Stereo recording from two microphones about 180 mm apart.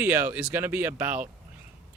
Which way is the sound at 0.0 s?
10° right (ahead or behind).